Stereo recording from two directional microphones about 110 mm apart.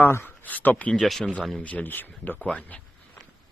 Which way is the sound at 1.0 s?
Centre (ahead or behind).